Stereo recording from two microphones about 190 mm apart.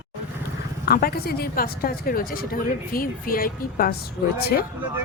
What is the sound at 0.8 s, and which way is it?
A woman's voice, 55° left (ahead or behind).